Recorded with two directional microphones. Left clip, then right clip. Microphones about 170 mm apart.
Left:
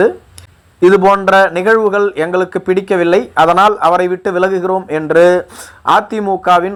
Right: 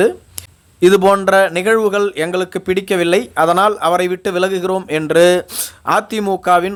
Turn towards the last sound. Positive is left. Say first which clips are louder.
# left 2 dB
turn(degrees=-25)  # may be behind; listen again after turning